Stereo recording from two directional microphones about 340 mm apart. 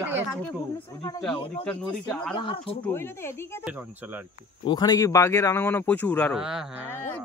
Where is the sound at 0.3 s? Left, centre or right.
Centre.